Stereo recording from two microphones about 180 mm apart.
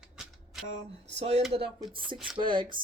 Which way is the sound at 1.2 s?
35° right (ahead or behind).